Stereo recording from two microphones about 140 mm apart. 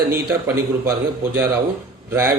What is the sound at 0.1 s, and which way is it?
A man's voice, 20° right (ahead or behind).